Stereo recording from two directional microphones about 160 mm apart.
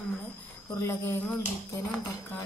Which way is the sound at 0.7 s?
15° left (ahead or behind).